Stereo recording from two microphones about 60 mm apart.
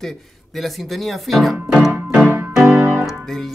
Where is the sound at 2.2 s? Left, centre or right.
Right.